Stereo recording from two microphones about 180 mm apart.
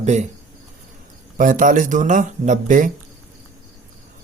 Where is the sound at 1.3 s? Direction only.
45° right (ahead or behind).